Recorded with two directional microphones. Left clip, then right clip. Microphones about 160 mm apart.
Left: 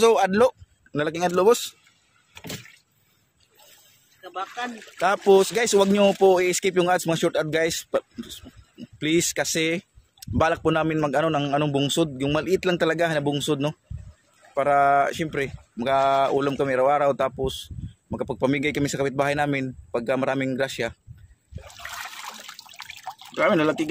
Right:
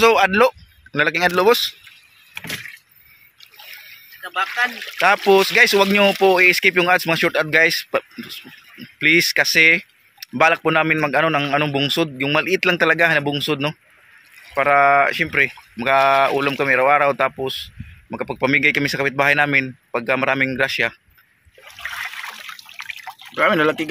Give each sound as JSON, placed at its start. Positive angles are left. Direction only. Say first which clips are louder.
{"t": 0.0, "sound": "speech", "louder": "right 4 dB", "side_deg": 0}
{"t": 2.3, "sound": "vehicle", "louder": "right 9 dB", "side_deg": 10}
{"t": 5.0, "sound": "speech", "louder": "right 4 dB", "side_deg": 10}
{"t": 21.6, "sound": "water", "louder": "right 7 dB", "side_deg": 75}
{"t": 23.3, "sound": "speech", "louder": "right 4 dB", "side_deg": 0}